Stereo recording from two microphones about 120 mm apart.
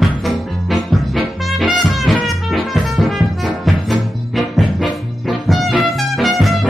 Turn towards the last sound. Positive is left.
turn(degrees=0)  # may be behind; listen again after turning